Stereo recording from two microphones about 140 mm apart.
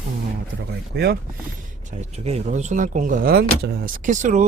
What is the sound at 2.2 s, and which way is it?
Speech, 55° right (ahead or behind).